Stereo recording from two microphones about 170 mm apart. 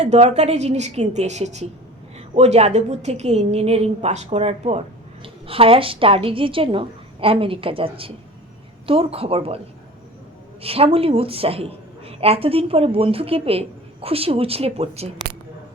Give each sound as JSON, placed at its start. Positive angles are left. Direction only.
{"t": 0.0, "sound": "a woman's voice", "side_deg": -40}
{"t": 10.6, "sound": "a woman's voice", "side_deg": -35}